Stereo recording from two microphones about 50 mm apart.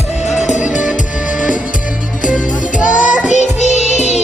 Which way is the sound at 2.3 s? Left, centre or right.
Right.